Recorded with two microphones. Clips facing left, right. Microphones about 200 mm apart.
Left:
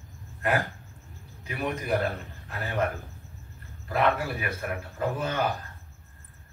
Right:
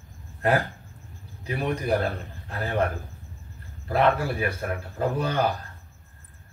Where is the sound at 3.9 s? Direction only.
30° right (ahead or behind).